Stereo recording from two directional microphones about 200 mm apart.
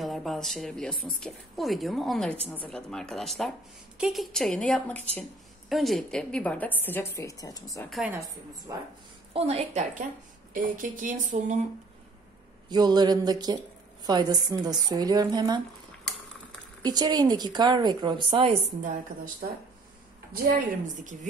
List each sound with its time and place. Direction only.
0.0 s a woman's voice: centre (ahead or behind); by 7.9 s 15° left (ahead or behind)
7.9 s a woman's voice: 5° right (ahead or behind)
9.3 s speech: 30° right (ahead or behind)
12.6 s speech: 20° right (ahead or behind)
16.8 s speech: 20° right (ahead or behind); by 19.3 s 40° right (ahead or behind)
20.4 s speech: 40° right (ahead or behind)